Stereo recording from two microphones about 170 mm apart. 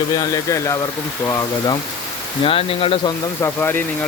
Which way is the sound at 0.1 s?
20° left (ahead or behind).